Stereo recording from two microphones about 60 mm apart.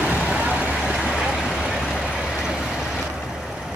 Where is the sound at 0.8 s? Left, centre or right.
Centre.